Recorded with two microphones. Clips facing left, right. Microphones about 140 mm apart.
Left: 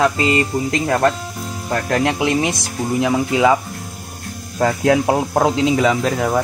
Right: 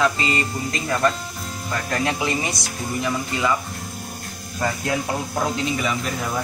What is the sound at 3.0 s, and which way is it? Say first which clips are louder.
Speech: left 9 dB; 90° left.